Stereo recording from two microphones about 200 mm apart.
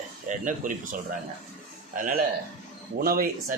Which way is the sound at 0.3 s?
40° right (ahead or behind).